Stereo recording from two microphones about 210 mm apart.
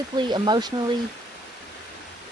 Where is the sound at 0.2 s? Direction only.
20° right (ahead or behind).